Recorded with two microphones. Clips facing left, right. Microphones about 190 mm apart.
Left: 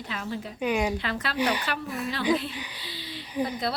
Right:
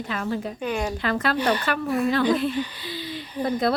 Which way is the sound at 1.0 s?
50° right (ahead or behind).